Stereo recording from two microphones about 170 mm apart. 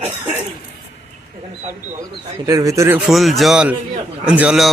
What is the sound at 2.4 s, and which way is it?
Speech, 20° right (ahead or behind).